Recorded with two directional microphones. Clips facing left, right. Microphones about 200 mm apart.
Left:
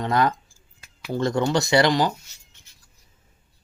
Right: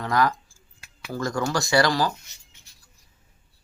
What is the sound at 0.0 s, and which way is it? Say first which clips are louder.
Speech: left 1 dB; 20° left (ahead or behind).